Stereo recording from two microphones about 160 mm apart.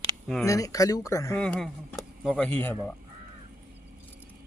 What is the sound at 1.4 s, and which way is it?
Speech, 5° left (ahead or behind).